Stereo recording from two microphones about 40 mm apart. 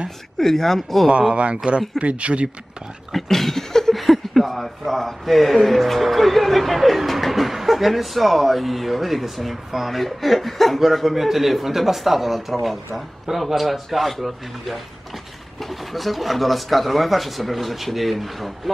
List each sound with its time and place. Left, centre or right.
0.4 s speech: centre
1.3 s speech: right
3.1 s a sound: centre
3.9 s a man's voice: centre
15.9 s a man's voice: centre